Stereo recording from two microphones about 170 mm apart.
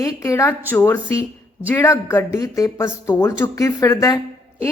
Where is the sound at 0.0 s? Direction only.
20° left (ahead or behind).